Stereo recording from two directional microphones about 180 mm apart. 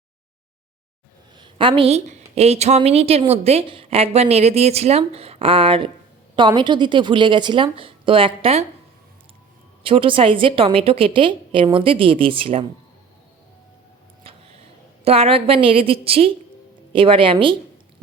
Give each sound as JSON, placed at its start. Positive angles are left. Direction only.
{"t": 1.4, "sound": "a woman's voice", "side_deg": -25}
{"t": 9.8, "sound": "a woman's voice", "side_deg": -30}
{"t": 15.0, "sound": "a woman's voice", "side_deg": -35}